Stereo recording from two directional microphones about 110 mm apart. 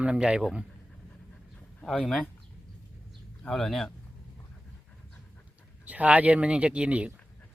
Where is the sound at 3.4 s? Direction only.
5° left (ahead or behind).